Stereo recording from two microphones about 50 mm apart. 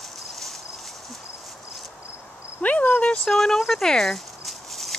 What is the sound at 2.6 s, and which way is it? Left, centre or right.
Insect, left.